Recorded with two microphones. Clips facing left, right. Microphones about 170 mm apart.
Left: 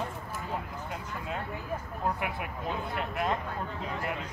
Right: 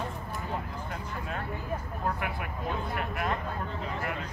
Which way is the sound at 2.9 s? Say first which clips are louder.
Left 3 dB; 25° left (ahead or behind).